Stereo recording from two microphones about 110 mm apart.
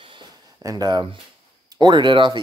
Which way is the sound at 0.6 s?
35° right (ahead or behind).